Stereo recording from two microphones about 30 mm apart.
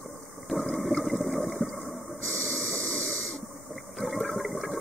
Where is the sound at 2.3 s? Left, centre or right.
Left.